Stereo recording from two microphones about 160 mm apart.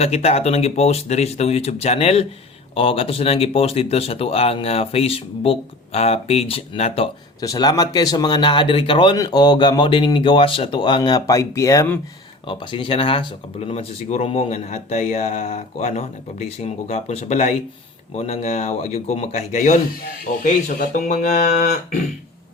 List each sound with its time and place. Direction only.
0.0 s speech: 40° left (ahead or behind)
7.4 s speech: 20° left (ahead or behind)
12.5 s a man's voice: 30° left (ahead or behind); by 21.5 s 50° left (ahead or behind)